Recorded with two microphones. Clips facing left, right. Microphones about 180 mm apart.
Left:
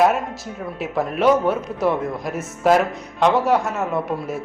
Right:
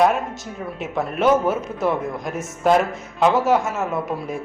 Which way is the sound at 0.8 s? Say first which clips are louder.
Left 1 dB; centre (ahead or behind).